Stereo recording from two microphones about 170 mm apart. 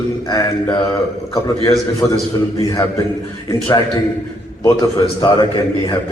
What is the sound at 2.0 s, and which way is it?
Speech, 10° left (ahead or behind).